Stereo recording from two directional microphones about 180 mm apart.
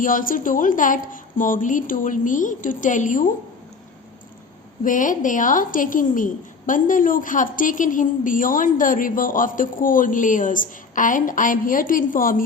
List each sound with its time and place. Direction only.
0.0 s a woman's voice: 50° left (ahead or behind)
4.8 s a woman's voice: 45° left (ahead or behind)